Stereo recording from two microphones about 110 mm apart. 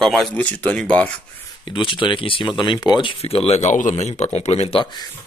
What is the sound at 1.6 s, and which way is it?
Speech, 50° left (ahead or behind).